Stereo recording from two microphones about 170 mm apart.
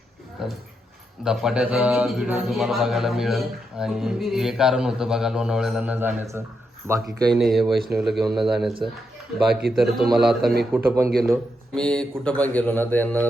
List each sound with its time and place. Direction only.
0.4 s a man's voice: 5° right (ahead or behind)
7.3 s a man's voice: centre (ahead or behind)
10.7 s a man's voice: 10° right (ahead or behind)
11.3 s speech: 5° left (ahead or behind)